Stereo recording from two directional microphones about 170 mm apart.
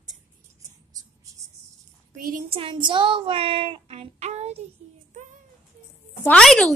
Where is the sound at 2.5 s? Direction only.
30° right (ahead or behind).